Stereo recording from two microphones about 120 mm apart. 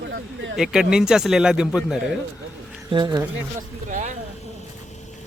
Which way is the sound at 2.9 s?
40° right (ahead or behind).